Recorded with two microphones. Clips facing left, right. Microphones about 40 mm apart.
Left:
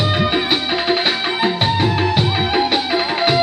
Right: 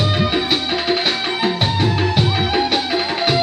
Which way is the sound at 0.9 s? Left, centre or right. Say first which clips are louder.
Left 1 dB; centre.